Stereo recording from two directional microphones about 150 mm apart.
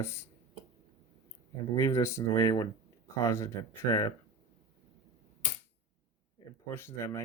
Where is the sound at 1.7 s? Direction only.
20° left (ahead or behind).